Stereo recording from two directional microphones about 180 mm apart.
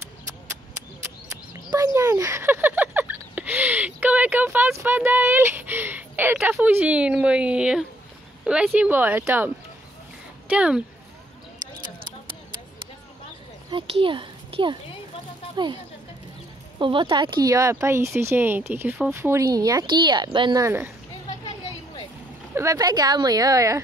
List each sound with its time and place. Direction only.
2.0 s speech: 15° right (ahead or behind)
10.5 s speech: 5° right (ahead or behind)
13.7 s a child's voice: 30° right (ahead or behind)
22.5 s speech: 15° right (ahead or behind)